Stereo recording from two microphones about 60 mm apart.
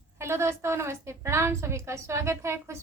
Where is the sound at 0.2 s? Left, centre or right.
Right.